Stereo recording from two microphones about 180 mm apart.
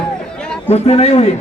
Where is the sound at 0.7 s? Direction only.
35° left (ahead or behind).